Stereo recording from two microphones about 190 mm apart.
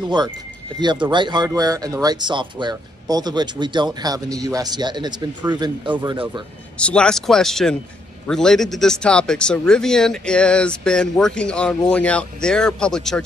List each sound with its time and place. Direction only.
0.7 s speech: 25° right (ahead or behind)
6.8 s speech: 5° left (ahead or behind)